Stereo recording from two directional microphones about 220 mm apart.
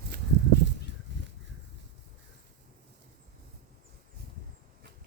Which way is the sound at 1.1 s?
55° right (ahead or behind).